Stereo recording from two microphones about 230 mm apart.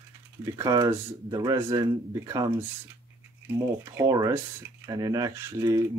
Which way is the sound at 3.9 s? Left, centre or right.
Centre.